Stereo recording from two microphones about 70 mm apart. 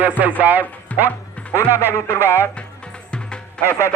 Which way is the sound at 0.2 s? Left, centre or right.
Right.